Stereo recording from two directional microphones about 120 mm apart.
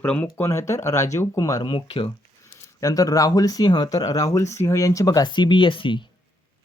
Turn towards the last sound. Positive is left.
turn(degrees=45)  # may be behind; listen again after turning